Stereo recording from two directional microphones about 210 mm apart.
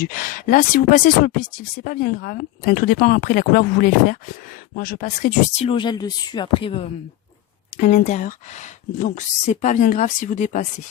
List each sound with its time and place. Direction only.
0.0 s speech: 40° left (ahead or behind)